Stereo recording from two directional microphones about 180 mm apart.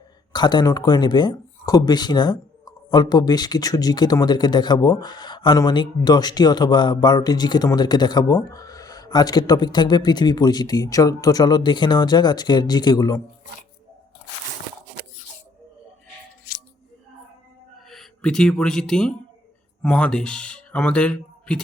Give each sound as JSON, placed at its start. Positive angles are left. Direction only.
{"t": 0.3, "sound": "speech", "side_deg": 25}
{"t": 17.8, "sound": "speech", "side_deg": 0}